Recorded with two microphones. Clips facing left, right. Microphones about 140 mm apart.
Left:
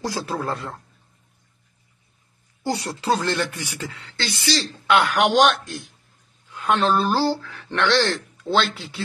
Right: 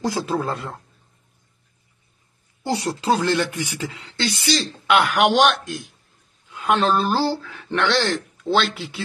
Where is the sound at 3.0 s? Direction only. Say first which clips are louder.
Right 2 dB; 5° right (ahead or behind).